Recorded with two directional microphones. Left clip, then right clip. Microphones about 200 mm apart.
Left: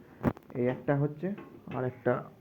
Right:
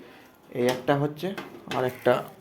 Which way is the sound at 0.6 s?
5° right (ahead or behind).